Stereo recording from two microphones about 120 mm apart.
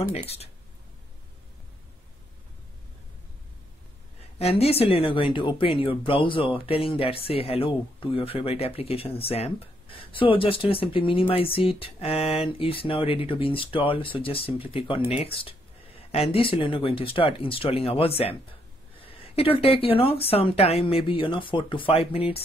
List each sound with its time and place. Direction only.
4.4 s speech: 60° left (ahead or behind)